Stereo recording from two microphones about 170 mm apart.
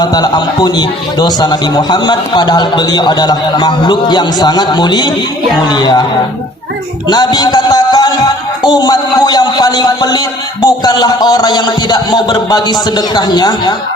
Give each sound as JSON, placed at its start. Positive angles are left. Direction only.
{"t": 0.0, "sound": "a man's voice", "side_deg": 25}
{"t": 7.1, "sound": "a man's voice", "side_deg": 25}